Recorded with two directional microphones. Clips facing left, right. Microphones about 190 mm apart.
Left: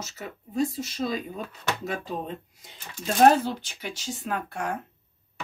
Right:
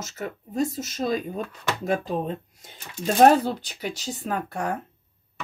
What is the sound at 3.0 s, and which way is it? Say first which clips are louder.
Speech: right 2 dB; 35° right (ahead or behind).